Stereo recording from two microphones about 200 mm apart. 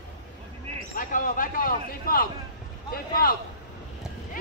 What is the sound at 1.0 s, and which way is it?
Speech, 40° left (ahead or behind).